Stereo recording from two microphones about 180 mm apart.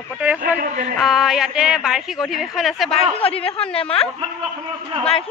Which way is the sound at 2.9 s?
30° left (ahead or behind).